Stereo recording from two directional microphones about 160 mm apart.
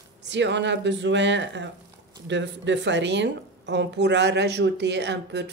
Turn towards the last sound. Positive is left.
turn(degrees=-90)